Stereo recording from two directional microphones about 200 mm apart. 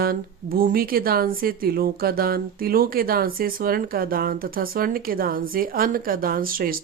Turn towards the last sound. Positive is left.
turn(degrees=-45)  # may be behind; listen again after turning